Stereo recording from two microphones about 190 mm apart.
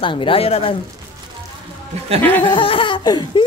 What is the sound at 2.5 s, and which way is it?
Speech, 25° left (ahead or behind).